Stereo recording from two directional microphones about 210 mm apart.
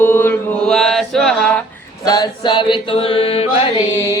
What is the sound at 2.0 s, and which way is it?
Chant, 15° left (ahead or behind).